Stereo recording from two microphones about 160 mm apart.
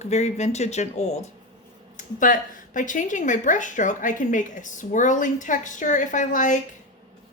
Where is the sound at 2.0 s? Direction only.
55° left (ahead or behind).